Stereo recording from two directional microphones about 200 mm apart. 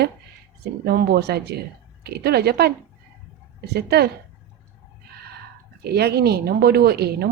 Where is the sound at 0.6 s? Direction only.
50° right (ahead or behind).